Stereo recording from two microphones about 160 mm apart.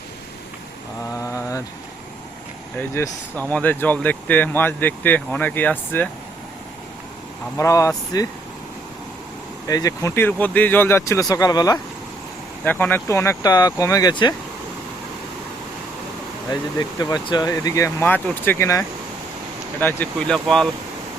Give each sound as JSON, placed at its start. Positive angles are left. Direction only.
{"t": 1.2, "sound": "mantra", "side_deg": 20}
{"t": 2.7, "sound": "speech", "side_deg": 15}
{"t": 7.5, "sound": "speech", "side_deg": 20}
{"t": 9.6, "sound": "speech", "side_deg": 20}
{"t": 12.6, "sound": "speech", "side_deg": 10}
{"t": 17.0, "sound": "speech", "side_deg": 25}